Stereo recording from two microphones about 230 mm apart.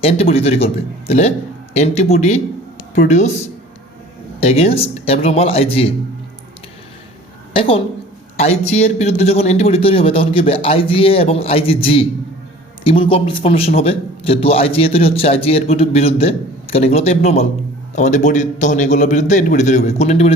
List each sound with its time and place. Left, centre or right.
0.0 s a man's voice: left
4.4 s a man's voice: left
7.5 s a woman's voice: left